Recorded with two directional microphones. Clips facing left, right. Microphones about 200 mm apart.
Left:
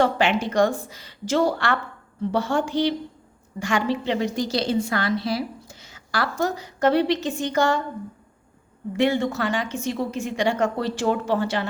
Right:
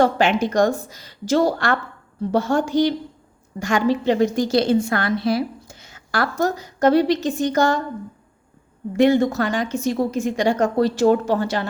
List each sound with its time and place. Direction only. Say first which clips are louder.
0.0 s a woman's voice: right 3 dB; 45° right (ahead or behind)
9.0 s a woman's voice: right 5 dB; 40° right (ahead or behind)